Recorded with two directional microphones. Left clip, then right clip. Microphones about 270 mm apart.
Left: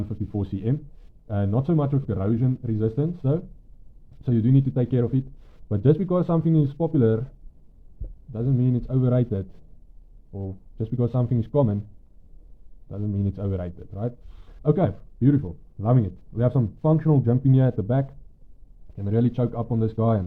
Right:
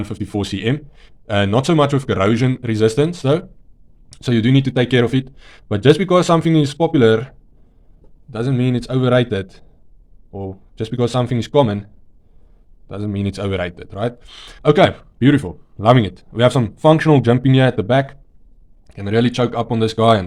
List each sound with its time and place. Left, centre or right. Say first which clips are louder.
0.3 s speech: right 9 dB; centre
8.5 s speech: right 6 dB; centre
10.3 s speech: right 9 dB; right
10.8 s speech: right 9 dB; centre
12.9 s speech: right 7 dB; right
13.2 s speech: right 13 dB; centre